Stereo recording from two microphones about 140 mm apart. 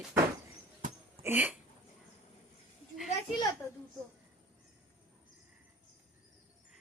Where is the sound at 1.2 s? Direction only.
10° right (ahead or behind).